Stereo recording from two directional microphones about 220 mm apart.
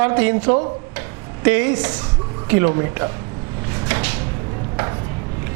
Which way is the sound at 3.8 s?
10° right (ahead or behind).